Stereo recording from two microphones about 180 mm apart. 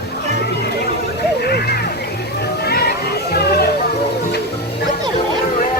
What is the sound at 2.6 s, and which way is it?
Children playing, 60° left (ahead or behind).